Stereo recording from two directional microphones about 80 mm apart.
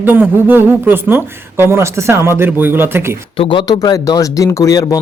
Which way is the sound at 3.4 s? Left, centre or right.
Left.